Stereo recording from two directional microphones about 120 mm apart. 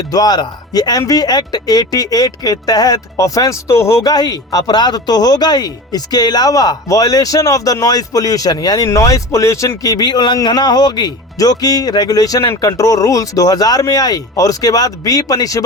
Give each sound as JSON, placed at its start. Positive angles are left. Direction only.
{"t": 0.1, "sound": "speech", "side_deg": 35}